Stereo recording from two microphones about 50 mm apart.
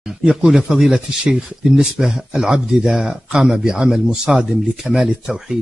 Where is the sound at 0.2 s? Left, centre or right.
Centre.